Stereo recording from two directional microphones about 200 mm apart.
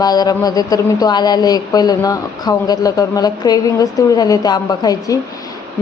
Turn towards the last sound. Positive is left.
turn(degrees=20)  # may be behind; listen again after turning